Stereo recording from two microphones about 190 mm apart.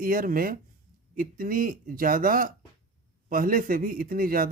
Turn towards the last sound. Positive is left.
turn(degrees=-50)  # may be behind; listen again after turning